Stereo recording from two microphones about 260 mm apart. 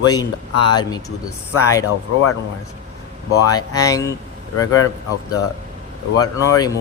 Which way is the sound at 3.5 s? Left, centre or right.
Centre.